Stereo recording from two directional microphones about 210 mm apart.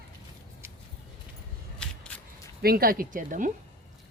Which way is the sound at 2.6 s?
45° right (ahead or behind).